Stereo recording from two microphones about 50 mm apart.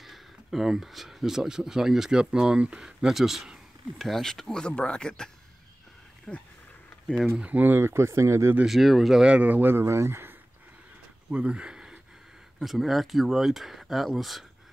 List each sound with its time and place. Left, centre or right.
0.0 s speech: centre; by 2.8 s right
2.8 s speech: centre
4.0 s speech: centre
4.6 s speech: left
7.4 s a man's voice: right
7.8 s speech: right
8.6 s speech: centre
9.4 s a man's voice: right
9.8 s speech: right
11.2 s a sound: right
12.5 s speech: centre